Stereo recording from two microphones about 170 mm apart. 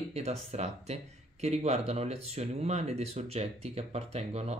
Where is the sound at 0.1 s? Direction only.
40° right (ahead or behind).